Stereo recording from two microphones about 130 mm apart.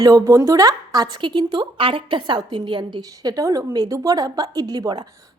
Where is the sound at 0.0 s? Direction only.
25° right (ahead or behind).